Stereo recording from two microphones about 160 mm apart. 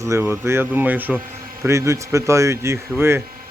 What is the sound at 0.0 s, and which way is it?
Speech, 15° right (ahead or behind).